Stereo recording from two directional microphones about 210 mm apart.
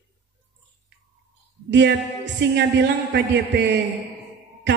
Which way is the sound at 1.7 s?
60° right (ahead or behind).